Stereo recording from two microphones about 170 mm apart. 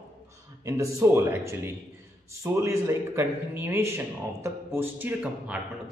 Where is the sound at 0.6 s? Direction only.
20° right (ahead or behind).